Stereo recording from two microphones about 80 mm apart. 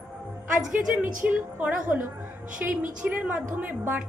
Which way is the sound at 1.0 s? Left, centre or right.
Right.